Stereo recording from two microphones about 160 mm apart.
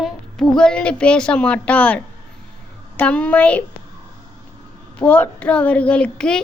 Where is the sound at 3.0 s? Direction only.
10° left (ahead or behind).